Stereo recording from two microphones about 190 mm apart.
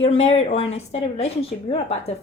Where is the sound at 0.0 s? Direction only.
35° left (ahead or behind).